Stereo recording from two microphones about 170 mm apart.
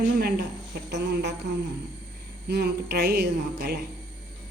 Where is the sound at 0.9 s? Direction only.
80° right.